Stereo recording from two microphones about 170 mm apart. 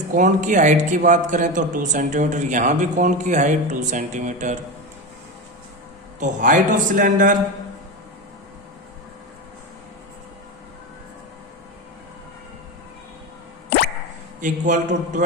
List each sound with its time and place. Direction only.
0.1 s a man's voice: 45° right (ahead or behind)
6.1 s a man's voice: 50° right (ahead or behind)
14.4 s a man's voice: 50° right (ahead or behind)